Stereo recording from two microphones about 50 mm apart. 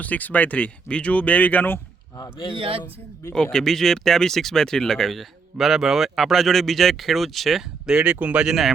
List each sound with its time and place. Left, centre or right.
0.0 s speech: left
3.3 s speech: centre
7.9 s speech: right
8.4 s speech: centre